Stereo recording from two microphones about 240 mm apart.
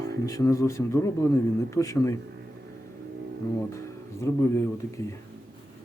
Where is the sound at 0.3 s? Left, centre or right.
Centre.